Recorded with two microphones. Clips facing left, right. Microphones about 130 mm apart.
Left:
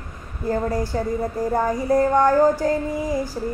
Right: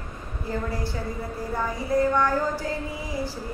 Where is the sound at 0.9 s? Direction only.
45° left (ahead or behind).